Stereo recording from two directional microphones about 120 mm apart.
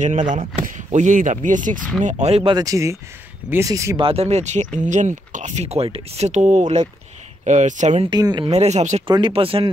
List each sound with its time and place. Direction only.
0.0 s speech: 85° right
2.0 s speech: 70° right (ahead or behind)
2.5 s speech: 30° right (ahead or behind)
4.0 s speech: 55° right (ahead or behind); by 8.0 s 90° right
8.1 s speech: 35° right (ahead or behind)
8.5 s speech: 65° right (ahead or behind)
9.0 s speech: 45° right (ahead or behind)